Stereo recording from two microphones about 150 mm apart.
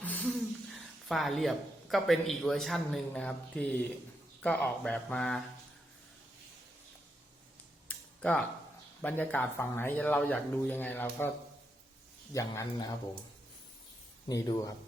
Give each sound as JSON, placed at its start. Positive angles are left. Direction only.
{"t": 0.0, "sound": "a sound", "side_deg": 10}
{"t": 2.4, "sound": "speech", "side_deg": 0}
{"t": 7.9, "sound": "cutlery", "side_deg": 10}
{"t": 9.0, "sound": "speech", "side_deg": 10}
{"t": 12.3, "sound": "speech", "side_deg": 20}
{"t": 14.3, "sound": "speech", "side_deg": 25}